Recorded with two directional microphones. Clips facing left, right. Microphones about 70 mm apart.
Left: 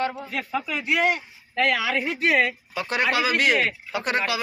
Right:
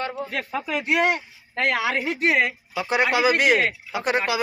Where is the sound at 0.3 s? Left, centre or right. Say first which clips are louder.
Right 1 dB; right.